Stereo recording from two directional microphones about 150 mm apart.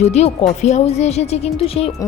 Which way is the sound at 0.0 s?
45° left (ahead or behind).